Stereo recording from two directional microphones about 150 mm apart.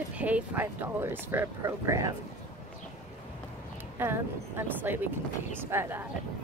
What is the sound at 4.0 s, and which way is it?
Speech, 15° right (ahead or behind).